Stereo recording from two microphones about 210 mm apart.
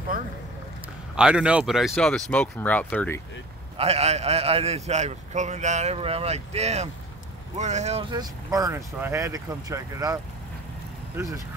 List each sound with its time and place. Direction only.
1.1 s speech: 5° right (ahead or behind)
3.7 s a man's voice: 30° right (ahead or behind)